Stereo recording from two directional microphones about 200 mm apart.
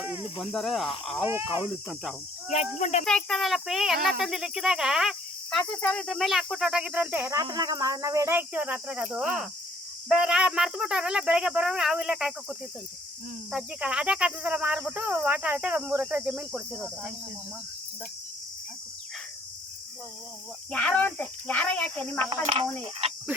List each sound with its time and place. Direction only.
0.0 s cricket: 5° right (ahead or behind)
1.3 s speech: 10° right (ahead or behind)
2.5 s speech: 35° left (ahead or behind)
3.1 s cricket: 5° left (ahead or behind)
7.4 s speech: 20° right (ahead or behind)
10.1 s cricket: 5° right (ahead or behind)
20.7 s speech: 5° left (ahead or behind)